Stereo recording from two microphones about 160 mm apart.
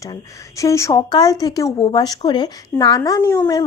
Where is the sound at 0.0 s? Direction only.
20° left (ahead or behind).